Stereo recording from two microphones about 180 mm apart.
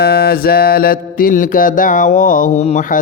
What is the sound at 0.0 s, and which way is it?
Mantra, 60° left (ahead or behind).